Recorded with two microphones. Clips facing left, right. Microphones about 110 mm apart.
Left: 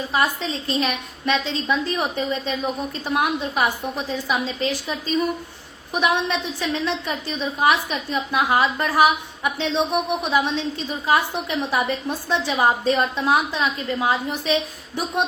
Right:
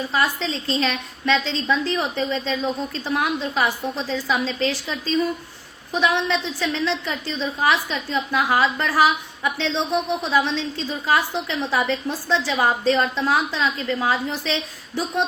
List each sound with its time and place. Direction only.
0.1 s a woman's voice: 20° left (ahead or behind)